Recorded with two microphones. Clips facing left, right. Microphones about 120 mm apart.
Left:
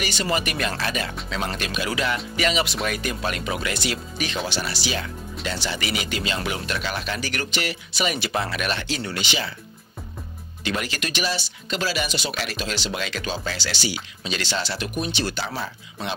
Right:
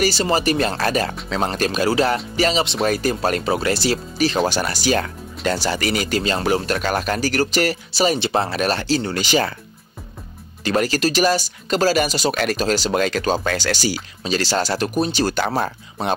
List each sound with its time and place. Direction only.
0.0 s speech: 35° right (ahead or behind)
0.7 s speech: 45° right (ahead or behind)
10.6 s speech: 40° right (ahead or behind)
15.4 s speech: 50° right (ahead or behind)